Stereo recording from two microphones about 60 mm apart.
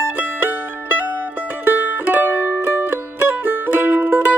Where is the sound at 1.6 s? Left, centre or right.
Right.